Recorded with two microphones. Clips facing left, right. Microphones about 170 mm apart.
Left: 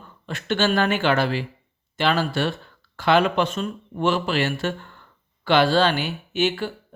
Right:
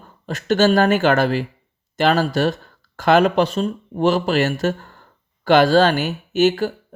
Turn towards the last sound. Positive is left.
turn(degrees=-40)  # may be behind; listen again after turning